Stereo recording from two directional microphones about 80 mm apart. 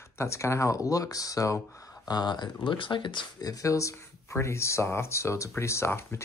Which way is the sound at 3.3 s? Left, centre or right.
Left.